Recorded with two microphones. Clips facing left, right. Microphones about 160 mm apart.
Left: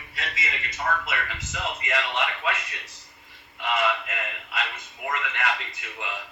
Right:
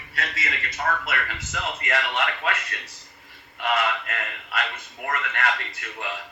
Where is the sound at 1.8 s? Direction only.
60° right (ahead or behind).